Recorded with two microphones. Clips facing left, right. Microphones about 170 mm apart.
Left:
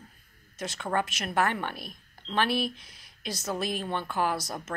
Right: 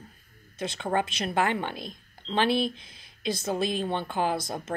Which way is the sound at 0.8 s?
20° right (ahead or behind).